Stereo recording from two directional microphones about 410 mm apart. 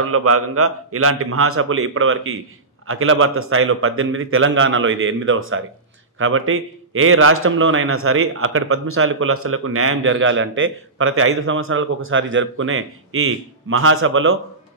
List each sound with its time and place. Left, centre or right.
0.0 s a man's voice: right